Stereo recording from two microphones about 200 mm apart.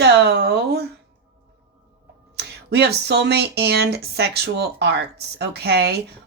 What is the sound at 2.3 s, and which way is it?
Speech, 55° right (ahead or behind).